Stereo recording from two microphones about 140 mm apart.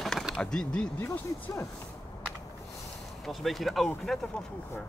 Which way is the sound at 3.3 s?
Centre (ahead or behind).